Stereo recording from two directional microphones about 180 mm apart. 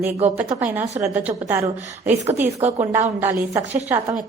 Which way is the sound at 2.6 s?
40° right (ahead or behind).